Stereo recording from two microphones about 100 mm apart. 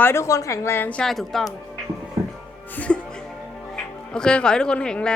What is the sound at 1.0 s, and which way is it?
Speech, centre (ahead or behind).